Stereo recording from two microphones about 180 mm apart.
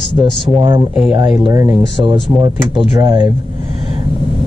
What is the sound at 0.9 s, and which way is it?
Speech, 10° right (ahead or behind).